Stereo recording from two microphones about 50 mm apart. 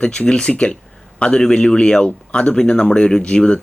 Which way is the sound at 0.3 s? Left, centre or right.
Centre.